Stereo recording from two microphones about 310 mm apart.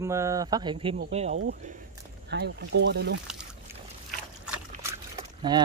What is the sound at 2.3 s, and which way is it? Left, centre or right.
Speech, right.